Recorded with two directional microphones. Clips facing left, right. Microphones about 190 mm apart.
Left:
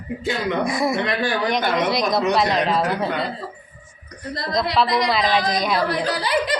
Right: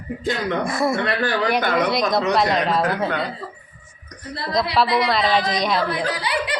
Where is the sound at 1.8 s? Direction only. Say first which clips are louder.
Even; centre (ahead or behind).